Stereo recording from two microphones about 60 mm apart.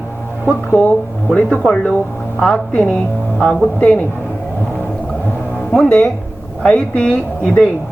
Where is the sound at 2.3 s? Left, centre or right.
Centre.